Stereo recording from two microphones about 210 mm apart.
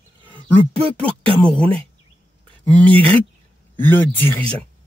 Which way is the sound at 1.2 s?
25° right (ahead or behind).